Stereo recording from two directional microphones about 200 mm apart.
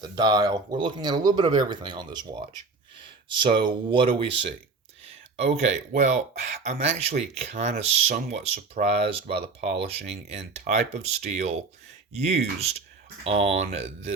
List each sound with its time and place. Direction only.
0.0 s speech: 20° right (ahead or behind)
5.4 s speech: 35° right (ahead or behind)